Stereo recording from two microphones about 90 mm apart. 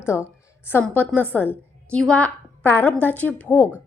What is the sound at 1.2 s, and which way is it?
A woman's voice, 20° left (ahead or behind).